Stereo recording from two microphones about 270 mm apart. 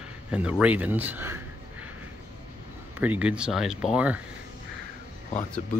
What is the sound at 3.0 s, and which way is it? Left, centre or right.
Speech, centre.